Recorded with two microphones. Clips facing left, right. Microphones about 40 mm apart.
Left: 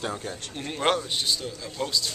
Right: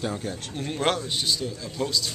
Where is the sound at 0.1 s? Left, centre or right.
Centre.